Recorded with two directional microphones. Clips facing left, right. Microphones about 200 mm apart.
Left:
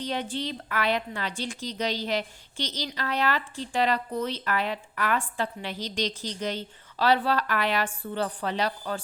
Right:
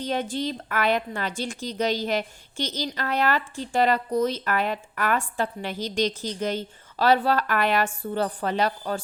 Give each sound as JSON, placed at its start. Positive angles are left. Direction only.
{"t": 0.0, "sound": "a woman's voice", "side_deg": -45}